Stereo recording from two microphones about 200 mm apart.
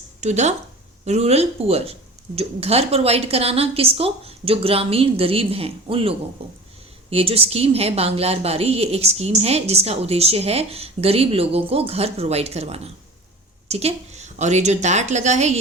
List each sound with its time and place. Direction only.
0.2 s a woman's voice: 35° right (ahead or behind)